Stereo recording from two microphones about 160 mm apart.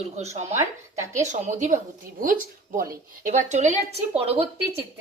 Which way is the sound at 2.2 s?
60° right (ahead or behind).